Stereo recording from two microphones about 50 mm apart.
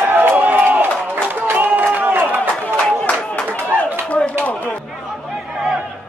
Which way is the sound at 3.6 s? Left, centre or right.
Right.